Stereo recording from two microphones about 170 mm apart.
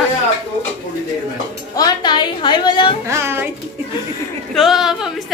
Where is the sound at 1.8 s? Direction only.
25° left (ahead or behind).